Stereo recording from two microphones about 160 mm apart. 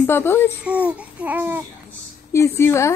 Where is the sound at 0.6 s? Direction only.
5° right (ahead or behind).